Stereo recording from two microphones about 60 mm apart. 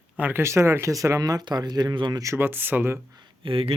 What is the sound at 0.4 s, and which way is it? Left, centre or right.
Speech, right.